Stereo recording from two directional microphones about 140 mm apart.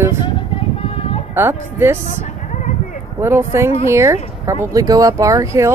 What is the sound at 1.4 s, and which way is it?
Speech, 15° right (ahead or behind).